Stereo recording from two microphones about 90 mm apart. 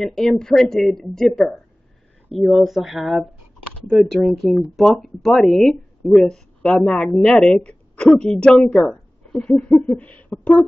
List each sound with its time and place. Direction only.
0.0 s a woman's voice: 5° left (ahead or behind)